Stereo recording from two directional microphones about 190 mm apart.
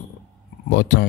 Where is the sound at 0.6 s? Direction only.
65° left (ahead or behind).